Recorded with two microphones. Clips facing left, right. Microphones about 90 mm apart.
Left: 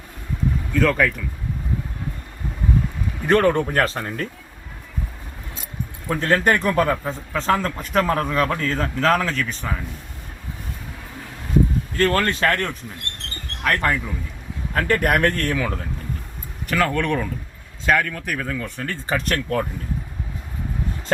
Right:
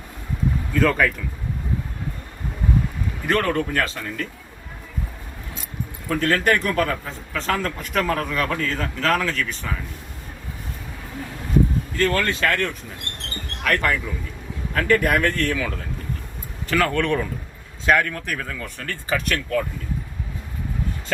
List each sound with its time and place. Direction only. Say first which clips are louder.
0.7 s speech: even; centre (ahead or behind)
3.2 s speech: left 4 dB; 25° left (ahead or behind)
3.8 s speech: left 3 dB; 40° left (ahead or behind)
6.1 s speech: left 1 dB; 25° left (ahead or behind)
11.9 s a man's voice: left 2 dB; 40° left (ahead or behind)
15.0 s speech: left 1 dB; 50° left (ahead or behind); by 15.7 s 35° left (ahead or behind)
16.6 s speech: even; 10° left (ahead or behind)
18.3 s speech: left 3 dB; 15° left (ahead or behind)
19.0 s speech: left 1 dB; 35° left (ahead or behind)